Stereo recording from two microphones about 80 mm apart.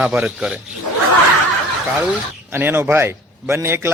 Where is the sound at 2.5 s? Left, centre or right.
Right.